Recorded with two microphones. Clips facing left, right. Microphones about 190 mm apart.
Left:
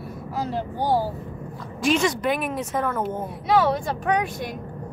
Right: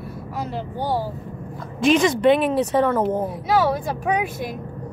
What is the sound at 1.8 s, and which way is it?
Speech, 20° right (ahead or behind).